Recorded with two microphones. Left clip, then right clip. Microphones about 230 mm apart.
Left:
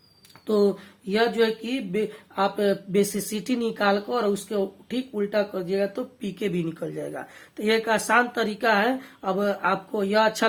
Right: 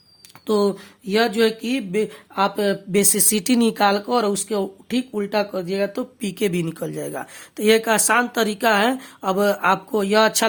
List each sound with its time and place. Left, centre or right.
0.4 s speech: right